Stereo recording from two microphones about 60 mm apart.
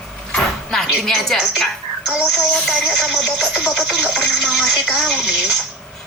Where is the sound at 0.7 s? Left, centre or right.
Centre.